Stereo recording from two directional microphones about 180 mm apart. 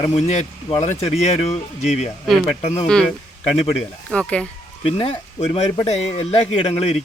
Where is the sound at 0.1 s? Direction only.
40° left (ahead or behind).